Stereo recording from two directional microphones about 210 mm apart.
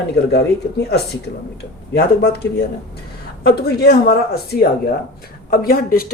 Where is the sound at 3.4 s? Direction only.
50° left (ahead or behind).